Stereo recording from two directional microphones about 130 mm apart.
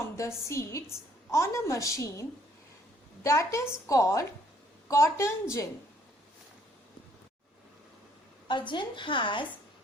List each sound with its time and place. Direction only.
0.0 s a woman's voice: 20° left (ahead or behind)
3.2 s a woman's voice: 20° left (ahead or behind)
8.4 s a woman's voice: 35° left (ahead or behind)